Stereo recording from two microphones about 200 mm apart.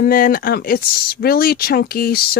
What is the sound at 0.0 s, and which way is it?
Speech, 45° left (ahead or behind).